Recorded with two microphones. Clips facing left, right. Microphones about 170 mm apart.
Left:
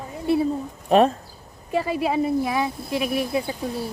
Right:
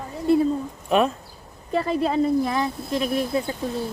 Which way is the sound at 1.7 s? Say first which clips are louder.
Right 1 dB; 5° left (ahead or behind).